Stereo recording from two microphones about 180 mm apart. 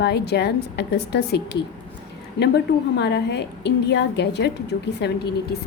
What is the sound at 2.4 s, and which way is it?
A woman's voice, 70° left (ahead or behind).